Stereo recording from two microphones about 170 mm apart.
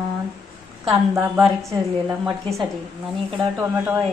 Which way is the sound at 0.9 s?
20° right (ahead or behind).